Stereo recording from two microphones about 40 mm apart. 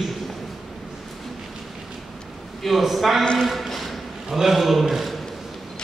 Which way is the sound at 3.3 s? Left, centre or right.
Centre.